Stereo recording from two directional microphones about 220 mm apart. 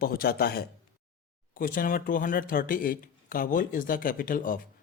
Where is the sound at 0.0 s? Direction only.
45° left (ahead or behind).